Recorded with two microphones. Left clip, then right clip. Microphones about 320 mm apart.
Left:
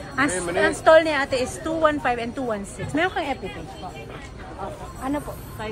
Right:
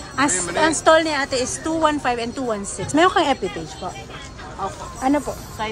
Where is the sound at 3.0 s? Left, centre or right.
Right.